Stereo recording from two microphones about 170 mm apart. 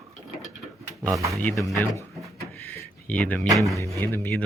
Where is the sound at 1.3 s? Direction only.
10° left (ahead or behind).